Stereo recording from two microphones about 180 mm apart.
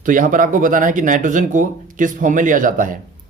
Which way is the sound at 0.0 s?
50° right (ahead or behind).